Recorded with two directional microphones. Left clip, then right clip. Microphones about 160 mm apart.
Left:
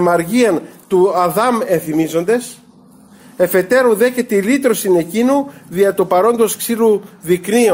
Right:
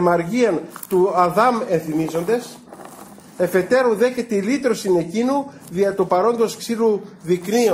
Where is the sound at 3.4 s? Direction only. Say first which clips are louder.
Left 5 dB; 5° left (ahead or behind).